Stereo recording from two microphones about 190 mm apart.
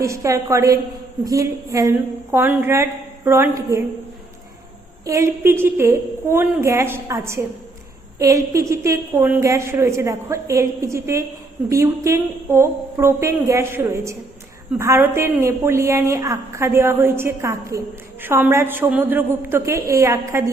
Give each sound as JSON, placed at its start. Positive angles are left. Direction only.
{"t": 0.0, "sound": "a woman's voice", "side_deg": -15}
{"t": 5.0, "sound": "a woman's voice", "side_deg": -15}